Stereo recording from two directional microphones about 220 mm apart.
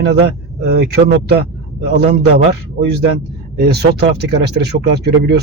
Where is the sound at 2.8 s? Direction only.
45° right (ahead or behind).